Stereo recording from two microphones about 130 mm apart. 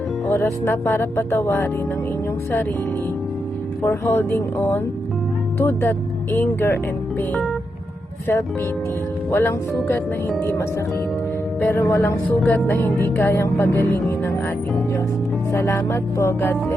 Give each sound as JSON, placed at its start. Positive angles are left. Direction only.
{"t": 0.3, "sound": "music", "side_deg": 20}
{"t": 3.8, "sound": "speech", "side_deg": 15}
{"t": 9.3, "sound": "speech", "side_deg": 15}
{"t": 10.4, "sound": "music", "side_deg": 20}
{"t": 15.5, "sound": "music", "side_deg": 20}